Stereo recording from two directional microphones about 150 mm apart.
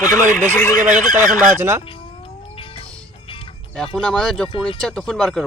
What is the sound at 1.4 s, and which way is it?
Speech, 15° right (ahead or behind).